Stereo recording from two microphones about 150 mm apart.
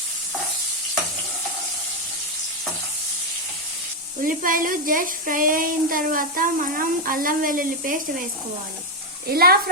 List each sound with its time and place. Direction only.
4.2 s speech: 65° right (ahead or behind)
9.2 s speech: 90° right